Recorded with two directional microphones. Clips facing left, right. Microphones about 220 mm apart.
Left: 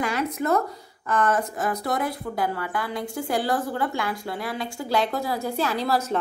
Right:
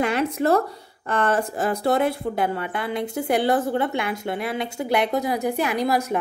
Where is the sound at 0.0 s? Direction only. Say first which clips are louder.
Right 4 dB; 25° right (ahead or behind).